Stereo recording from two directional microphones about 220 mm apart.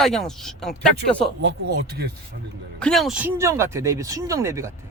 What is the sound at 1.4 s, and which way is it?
Speech, 50° right (ahead or behind).